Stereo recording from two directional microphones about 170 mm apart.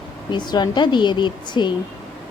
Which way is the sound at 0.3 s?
25° left (ahead or behind).